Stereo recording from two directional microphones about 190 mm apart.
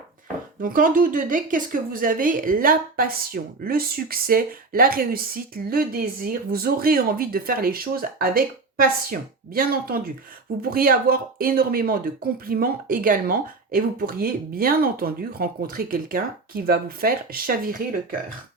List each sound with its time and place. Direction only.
0.6 s speech: 45° right (ahead or behind)